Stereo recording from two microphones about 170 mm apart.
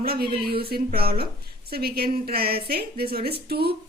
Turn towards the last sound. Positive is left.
turn(degrees=-65)  # may be behind; listen again after turning